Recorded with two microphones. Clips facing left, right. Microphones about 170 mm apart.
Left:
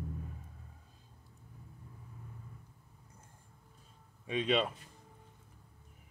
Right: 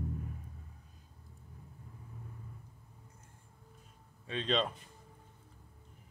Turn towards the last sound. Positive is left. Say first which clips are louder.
# left 2 dB
turn(degrees=10)  # may be behind; listen again after turning